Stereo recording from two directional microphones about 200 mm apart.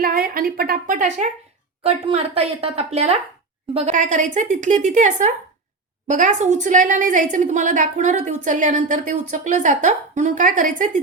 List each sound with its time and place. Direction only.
0.0 s a woman's voice: 45° right (ahead or behind)